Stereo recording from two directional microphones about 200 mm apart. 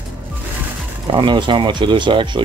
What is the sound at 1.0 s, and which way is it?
Speech, 25° right (ahead or behind).